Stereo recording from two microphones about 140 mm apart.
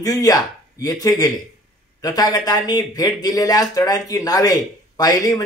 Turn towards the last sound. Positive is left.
turn(degrees=25)  # may be behind; listen again after turning